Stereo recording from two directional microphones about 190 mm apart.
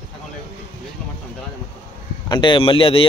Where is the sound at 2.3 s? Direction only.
25° left (ahead or behind).